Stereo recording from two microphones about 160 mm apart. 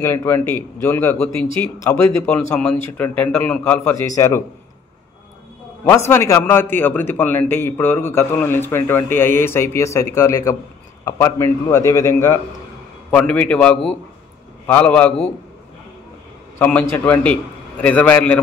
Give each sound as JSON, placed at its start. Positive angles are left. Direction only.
{"t": 0.0, "sound": "a man's voice", "side_deg": 15}
{"t": 5.9, "sound": "a man's voice", "side_deg": 15}
{"t": 16.5, "sound": "a man's voice", "side_deg": 10}